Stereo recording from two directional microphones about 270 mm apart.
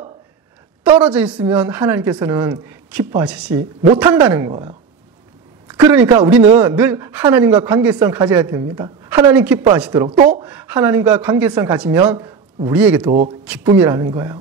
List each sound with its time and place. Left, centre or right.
0.9 s speech: centre
5.8 s speech: centre
10.0 s speech: right
10.4 s speech: centre